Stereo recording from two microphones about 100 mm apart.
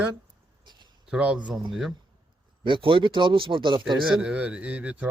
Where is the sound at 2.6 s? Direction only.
60° right (ahead or behind).